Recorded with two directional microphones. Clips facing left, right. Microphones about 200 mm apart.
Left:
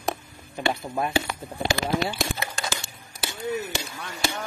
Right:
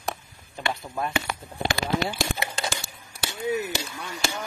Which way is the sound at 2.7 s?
Centre (ahead or behind).